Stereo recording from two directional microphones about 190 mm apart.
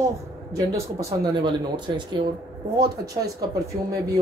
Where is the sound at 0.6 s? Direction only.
20° right (ahead or behind).